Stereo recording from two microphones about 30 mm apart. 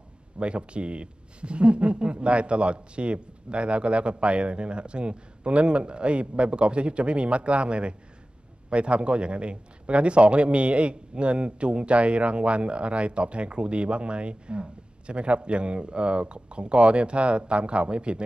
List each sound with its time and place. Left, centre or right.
0.4 s a man's voice: right